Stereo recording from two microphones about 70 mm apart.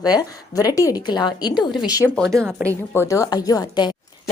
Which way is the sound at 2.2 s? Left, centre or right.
Centre.